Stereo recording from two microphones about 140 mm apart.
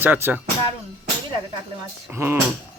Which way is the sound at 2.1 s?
20° right (ahead or behind).